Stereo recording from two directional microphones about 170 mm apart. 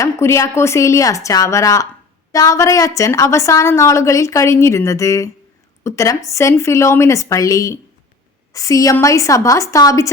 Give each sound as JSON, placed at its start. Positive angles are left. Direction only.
{"t": 0.0, "sound": "a woman's voice", "side_deg": 15}